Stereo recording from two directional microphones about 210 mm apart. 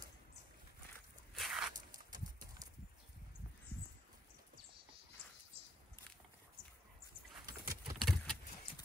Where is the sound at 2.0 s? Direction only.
20° right (ahead or behind).